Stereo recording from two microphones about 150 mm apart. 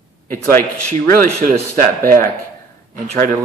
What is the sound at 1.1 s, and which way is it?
Speech, 70° right (ahead or behind).